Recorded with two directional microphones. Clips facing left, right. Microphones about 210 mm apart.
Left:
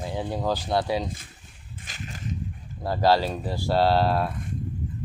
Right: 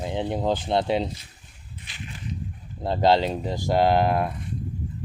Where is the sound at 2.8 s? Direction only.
20° right (ahead or behind).